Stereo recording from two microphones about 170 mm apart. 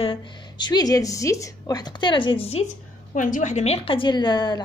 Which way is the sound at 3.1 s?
50° left (ahead or behind).